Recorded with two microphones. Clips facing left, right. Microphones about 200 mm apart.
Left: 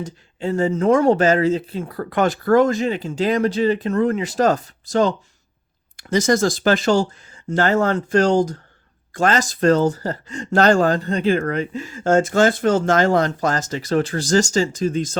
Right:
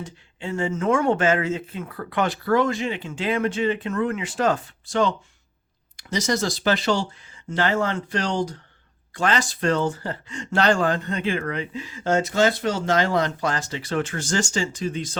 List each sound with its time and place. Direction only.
0.0 s speech: 40° left (ahead or behind)
6.0 s speech: 50° left (ahead or behind)